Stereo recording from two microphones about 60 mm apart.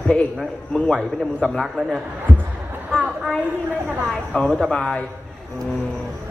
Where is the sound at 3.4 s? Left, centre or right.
Right.